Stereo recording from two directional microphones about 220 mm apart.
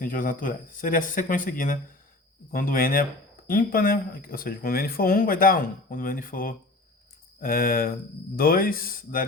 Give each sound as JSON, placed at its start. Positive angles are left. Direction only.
{"t": 0.0, "sound": "speech", "side_deg": 40}